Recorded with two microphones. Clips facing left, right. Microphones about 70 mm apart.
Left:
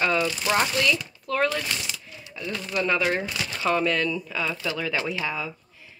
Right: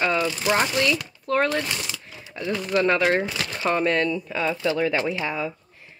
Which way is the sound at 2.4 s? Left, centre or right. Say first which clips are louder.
Right 6 dB; right.